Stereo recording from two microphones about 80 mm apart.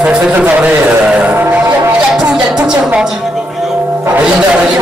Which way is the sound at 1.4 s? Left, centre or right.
Right.